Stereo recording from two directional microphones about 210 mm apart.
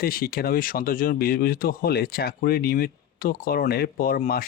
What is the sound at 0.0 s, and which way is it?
Speech, 45° left (ahead or behind).